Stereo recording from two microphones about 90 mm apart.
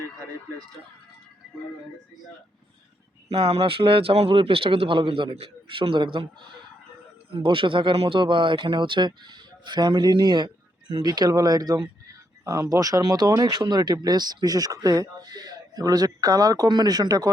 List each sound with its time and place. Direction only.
3.3 s speech: 90° right; by 6.2 s 65° right (ahead or behind)
7.3 s speech: 80° right; by 17.2 s 45° right (ahead or behind)